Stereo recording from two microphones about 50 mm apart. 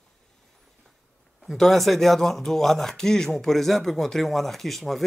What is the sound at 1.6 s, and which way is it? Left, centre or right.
Speech, centre.